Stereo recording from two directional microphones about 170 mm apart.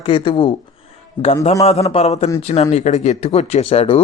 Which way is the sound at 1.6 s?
35° left (ahead or behind).